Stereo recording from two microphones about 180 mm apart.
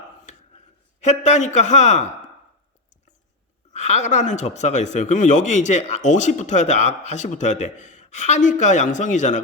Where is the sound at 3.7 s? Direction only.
40° left (ahead or behind).